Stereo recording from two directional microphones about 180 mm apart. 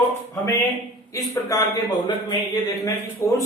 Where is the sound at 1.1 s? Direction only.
15° left (ahead or behind).